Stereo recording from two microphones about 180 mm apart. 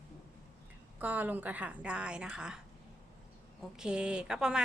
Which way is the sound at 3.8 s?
5° right (ahead or behind).